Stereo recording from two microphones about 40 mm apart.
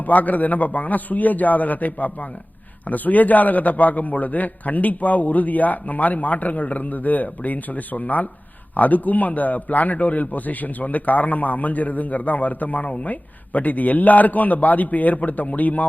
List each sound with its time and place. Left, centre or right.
0.1 s a man's voice: left